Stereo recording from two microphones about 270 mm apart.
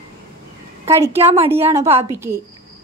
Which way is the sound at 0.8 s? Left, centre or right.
Centre.